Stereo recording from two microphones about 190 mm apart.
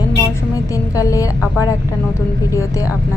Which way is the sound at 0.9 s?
15° left (ahead or behind).